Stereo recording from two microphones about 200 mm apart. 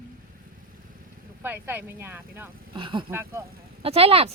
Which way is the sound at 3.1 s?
10° right (ahead or behind).